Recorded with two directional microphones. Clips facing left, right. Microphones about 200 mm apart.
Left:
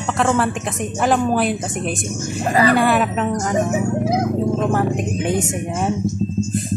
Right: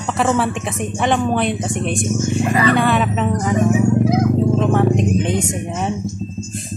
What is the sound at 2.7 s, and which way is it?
Speech, 5° left (ahead or behind).